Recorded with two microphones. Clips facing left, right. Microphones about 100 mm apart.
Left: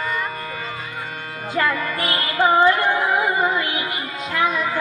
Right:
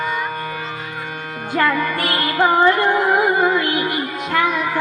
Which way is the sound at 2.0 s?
65° right (ahead or behind).